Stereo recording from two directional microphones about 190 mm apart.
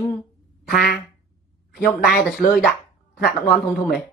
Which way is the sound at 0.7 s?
55° left (ahead or behind).